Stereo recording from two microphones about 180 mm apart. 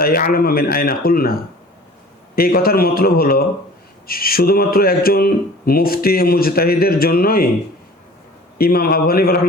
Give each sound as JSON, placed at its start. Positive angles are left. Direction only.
{"t": 0.0, "sound": "speech", "side_deg": 55}
{"t": 8.5, "sound": "speech", "side_deg": 55}